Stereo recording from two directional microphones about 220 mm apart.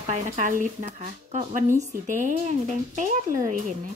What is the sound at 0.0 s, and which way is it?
Speech, 35° right (ahead or behind).